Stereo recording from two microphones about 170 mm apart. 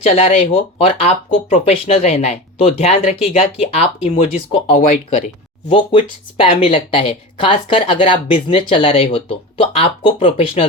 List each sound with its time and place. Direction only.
0.0 s speech: 35° left (ahead or behind)
4.7 s speech: 55° left (ahead or behind)
5.9 s speech: 30° left (ahead or behind)